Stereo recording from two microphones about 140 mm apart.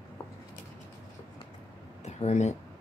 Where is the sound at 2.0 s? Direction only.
50° left (ahead or behind).